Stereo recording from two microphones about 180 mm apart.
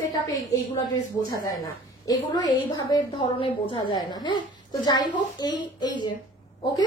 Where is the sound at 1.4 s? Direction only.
20° left (ahead or behind).